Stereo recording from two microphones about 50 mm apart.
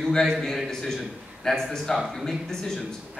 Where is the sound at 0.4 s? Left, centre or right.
Centre.